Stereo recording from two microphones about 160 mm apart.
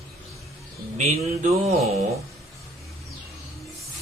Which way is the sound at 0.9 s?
45° right (ahead or behind).